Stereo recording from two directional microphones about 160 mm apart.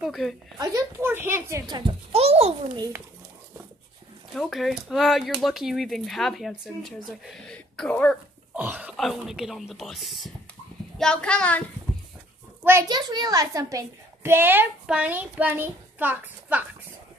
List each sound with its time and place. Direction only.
0.0 s speech: centre (ahead or behind)
0.6 s a woman's voice: 15° right (ahead or behind)
1.7 s a sound: 35° right (ahead or behind)
4.4 s speech: centre (ahead or behind)
8.5 s a child's voice: 10° right (ahead or behind); by 11.6 s 5° left (ahead or behind)
12.8 s a child's voice: 25° right (ahead or behind)